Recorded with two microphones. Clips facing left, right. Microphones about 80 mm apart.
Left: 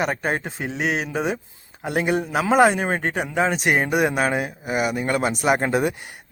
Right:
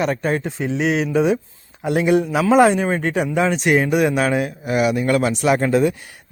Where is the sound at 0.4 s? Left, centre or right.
Left.